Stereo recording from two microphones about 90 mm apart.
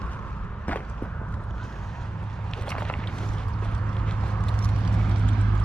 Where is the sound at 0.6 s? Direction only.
15° left (ahead or behind).